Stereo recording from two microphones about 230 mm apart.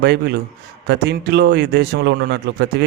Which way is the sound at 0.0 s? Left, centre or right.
Right.